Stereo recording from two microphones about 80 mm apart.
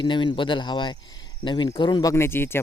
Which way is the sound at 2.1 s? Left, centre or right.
Left.